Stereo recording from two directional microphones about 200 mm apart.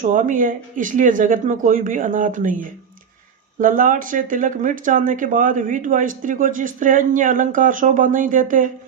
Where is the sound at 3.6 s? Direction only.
40° right (ahead or behind).